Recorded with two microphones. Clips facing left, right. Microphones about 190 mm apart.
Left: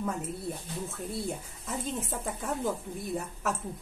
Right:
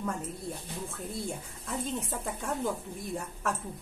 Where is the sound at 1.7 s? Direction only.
Centre (ahead or behind).